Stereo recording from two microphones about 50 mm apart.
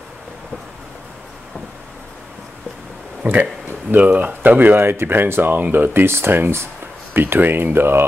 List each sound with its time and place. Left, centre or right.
3.2 s speech: right